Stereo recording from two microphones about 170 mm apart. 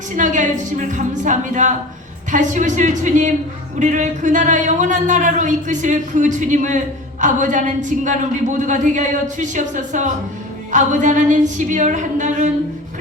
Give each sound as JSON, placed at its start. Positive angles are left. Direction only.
{"t": 0.2, "sound": "a man's voice", "side_deg": -45}